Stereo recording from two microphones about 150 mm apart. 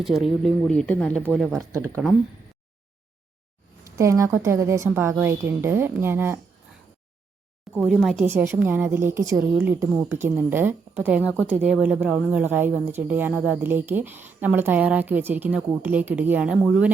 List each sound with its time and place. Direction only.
0.0 s speech: centre (ahead or behind)
1.7 s a woman's voice: 20° right (ahead or behind)
3.9 s a woman's voice: 20° right (ahead or behind)
7.8 s speech: centre (ahead or behind)
8.2 s speech: 15° right (ahead or behind)